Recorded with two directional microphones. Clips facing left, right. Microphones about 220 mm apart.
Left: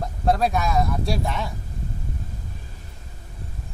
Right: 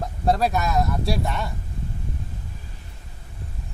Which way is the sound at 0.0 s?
Centre (ahead or behind).